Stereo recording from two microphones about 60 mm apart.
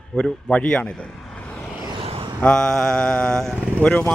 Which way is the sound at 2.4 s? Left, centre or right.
Centre.